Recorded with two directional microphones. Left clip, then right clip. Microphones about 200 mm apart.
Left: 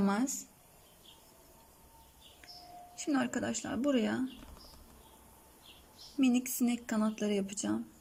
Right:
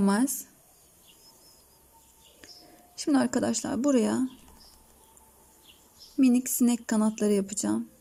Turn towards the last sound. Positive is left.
turn(degrees=-20)  # may be behind; listen again after turning